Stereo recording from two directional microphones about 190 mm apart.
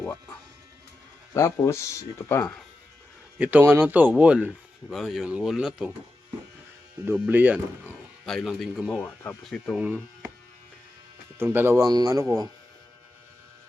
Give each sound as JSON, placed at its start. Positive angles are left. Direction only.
{"t": 1.3, "sound": "speech", "side_deg": 15}
{"t": 3.3, "sound": "speech", "side_deg": -10}
{"t": 7.0, "sound": "a man's voice", "side_deg": -10}
{"t": 9.0, "sound": "speech", "side_deg": 15}
{"t": 9.5, "sound": "speech", "side_deg": 0}
{"t": 11.3, "sound": "speech", "side_deg": -10}